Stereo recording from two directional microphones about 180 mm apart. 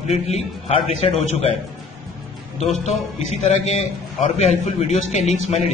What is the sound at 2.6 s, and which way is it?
A man's voice, 40° left (ahead or behind).